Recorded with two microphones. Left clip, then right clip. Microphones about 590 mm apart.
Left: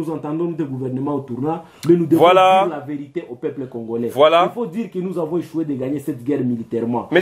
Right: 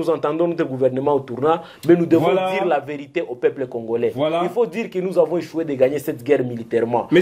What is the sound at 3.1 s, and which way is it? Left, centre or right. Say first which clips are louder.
Speech: right 7 dB; right.